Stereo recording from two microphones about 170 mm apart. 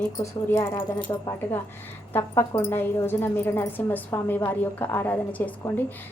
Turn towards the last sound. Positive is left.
turn(degrees=10)  # may be behind; listen again after turning